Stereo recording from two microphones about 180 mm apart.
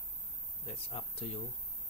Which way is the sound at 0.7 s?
30° left (ahead or behind).